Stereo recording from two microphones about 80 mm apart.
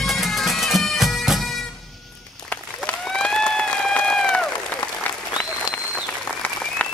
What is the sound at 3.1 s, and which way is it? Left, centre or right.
Run, centre.